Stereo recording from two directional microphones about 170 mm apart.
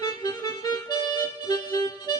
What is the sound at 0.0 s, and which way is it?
Music, 25° left (ahead or behind).